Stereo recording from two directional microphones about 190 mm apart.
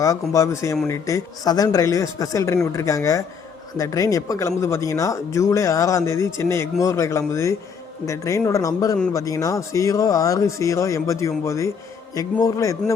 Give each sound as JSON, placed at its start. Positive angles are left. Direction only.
{"t": 0.0, "sound": "speech", "side_deg": 15}